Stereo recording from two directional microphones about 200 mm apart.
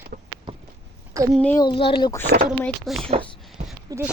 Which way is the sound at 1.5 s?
25° left (ahead or behind).